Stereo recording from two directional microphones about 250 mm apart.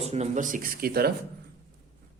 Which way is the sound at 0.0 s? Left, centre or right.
Right.